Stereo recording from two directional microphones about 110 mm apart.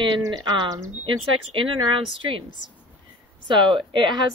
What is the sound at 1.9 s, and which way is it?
Speech, 50° right (ahead or behind).